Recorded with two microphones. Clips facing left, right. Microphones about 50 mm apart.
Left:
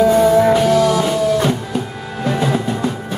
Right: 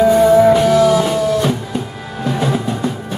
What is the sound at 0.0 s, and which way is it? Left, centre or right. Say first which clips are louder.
Music: right 2 dB; centre.